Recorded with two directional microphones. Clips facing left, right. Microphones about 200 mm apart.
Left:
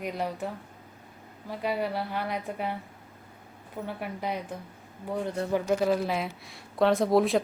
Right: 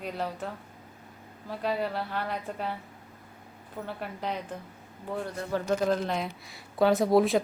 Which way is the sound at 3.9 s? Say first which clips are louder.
Left 1 dB; 10° left (ahead or behind).